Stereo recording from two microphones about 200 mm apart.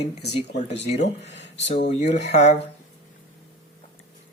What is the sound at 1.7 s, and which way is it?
Speech, 35° left (ahead or behind).